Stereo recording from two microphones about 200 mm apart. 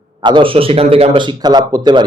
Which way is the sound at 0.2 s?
25° right (ahead or behind).